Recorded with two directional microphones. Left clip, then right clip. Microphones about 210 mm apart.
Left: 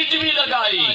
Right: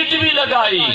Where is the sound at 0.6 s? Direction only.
55° right (ahead or behind).